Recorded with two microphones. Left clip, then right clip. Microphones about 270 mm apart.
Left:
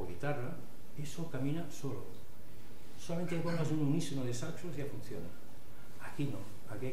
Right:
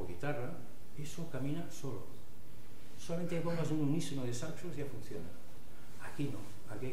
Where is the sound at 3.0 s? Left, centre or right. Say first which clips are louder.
Even; centre.